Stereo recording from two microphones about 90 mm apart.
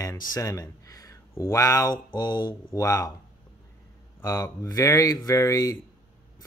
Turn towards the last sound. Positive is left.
turn(degrees=40)  # may be behind; listen again after turning